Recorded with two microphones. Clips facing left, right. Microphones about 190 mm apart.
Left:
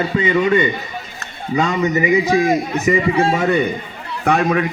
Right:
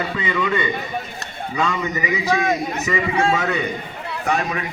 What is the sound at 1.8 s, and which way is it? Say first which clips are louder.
A man's voice: left 8 dB; 25° left (ahead or behind).